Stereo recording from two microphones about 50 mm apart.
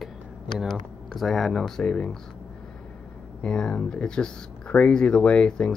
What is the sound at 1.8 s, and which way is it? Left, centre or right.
Speech, left.